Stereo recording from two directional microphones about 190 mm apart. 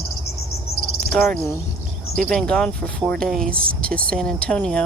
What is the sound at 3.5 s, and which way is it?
Speech, 50° right (ahead or behind).